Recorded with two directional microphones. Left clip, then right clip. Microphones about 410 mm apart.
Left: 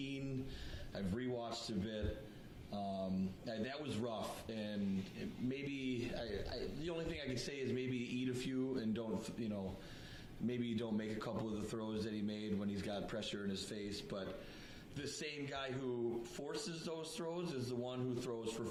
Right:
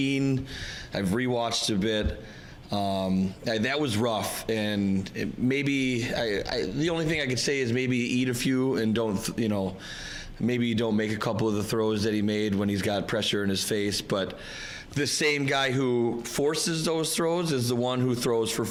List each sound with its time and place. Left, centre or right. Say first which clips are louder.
0.0 s a man's voice: right 18 dB; right